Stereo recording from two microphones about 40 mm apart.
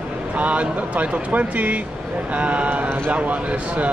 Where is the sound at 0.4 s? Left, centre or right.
Right.